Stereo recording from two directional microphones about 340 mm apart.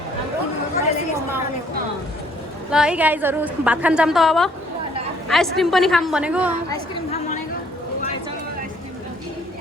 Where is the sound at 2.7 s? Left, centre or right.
Centre.